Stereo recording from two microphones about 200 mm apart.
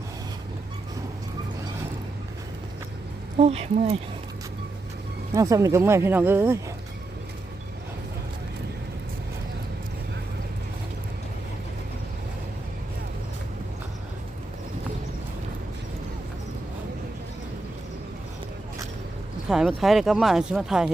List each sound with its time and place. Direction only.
3.3 s speech: 30° right (ahead or behind)
5.3 s speech: 15° right (ahead or behind)
19.5 s speech: 5° right (ahead or behind)